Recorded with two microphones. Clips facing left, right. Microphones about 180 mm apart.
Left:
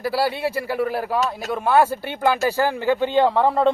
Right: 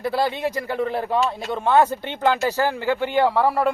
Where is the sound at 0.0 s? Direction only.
5° left (ahead or behind).